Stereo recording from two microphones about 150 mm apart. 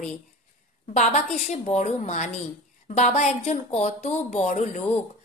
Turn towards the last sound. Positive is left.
turn(degrees=50)  # may be behind; listen again after turning